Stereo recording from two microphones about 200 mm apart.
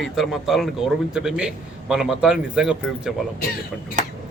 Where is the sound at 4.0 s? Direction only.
40° right (ahead or behind).